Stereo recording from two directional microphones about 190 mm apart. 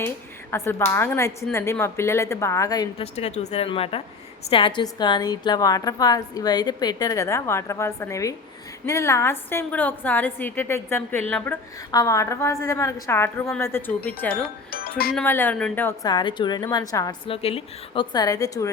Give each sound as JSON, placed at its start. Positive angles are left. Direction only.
{"t": 0.5, "sound": "a woman's voice", "side_deg": 15}
{"t": 3.0, "sound": "a woman's voice", "side_deg": 35}
{"t": 14.7, "sound": "speech", "side_deg": 50}
{"t": 15.1, "sound": "a woman's voice", "side_deg": 10}
{"t": 16.0, "sound": "a woman's voice", "side_deg": 25}
{"t": 17.2, "sound": "a woman's voice", "side_deg": 30}